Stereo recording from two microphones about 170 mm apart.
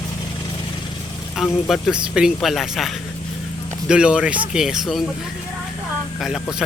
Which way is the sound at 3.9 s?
5° right (ahead or behind).